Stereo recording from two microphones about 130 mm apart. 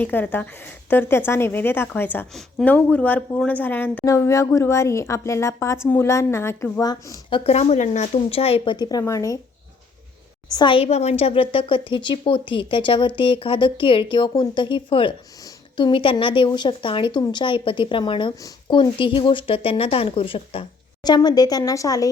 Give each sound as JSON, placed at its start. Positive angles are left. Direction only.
{"t": 0.0, "sound": "speech", "side_deg": 15}
{"t": 2.3, "sound": "speech", "side_deg": 5}
{"t": 2.7, "sound": "speech", "side_deg": 15}
{"t": 7.3, "sound": "speech", "side_deg": 40}
{"t": 7.5, "sound": "speech", "side_deg": 55}
{"t": 10.5, "sound": "speech", "side_deg": 35}
{"t": 10.8, "sound": "speech", "side_deg": 60}
{"t": 21.0, "sound": "speech", "side_deg": 30}